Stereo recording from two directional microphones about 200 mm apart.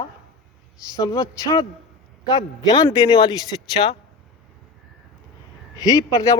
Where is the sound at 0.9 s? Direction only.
20° left (ahead or behind).